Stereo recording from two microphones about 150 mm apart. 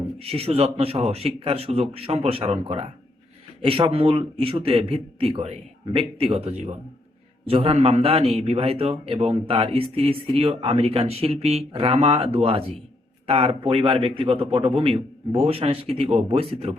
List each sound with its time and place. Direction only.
0.2 s a man's voice: 40° right (ahead or behind)